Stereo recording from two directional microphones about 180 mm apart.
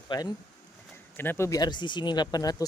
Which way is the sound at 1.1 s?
10° left (ahead or behind).